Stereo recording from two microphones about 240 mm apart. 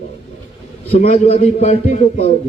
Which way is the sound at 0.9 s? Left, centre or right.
Left.